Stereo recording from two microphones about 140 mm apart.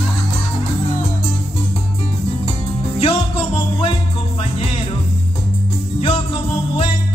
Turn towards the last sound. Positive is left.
turn(degrees=40)  # may be behind; listen again after turning